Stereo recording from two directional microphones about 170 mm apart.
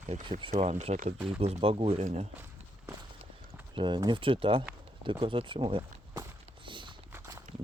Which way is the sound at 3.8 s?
25° right (ahead or behind).